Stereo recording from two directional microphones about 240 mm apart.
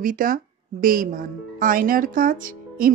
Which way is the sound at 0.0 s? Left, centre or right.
Right.